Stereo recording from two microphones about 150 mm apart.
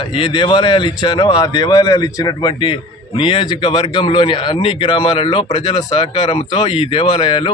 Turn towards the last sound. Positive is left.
turn(degrees=35)  # may be behind; listen again after turning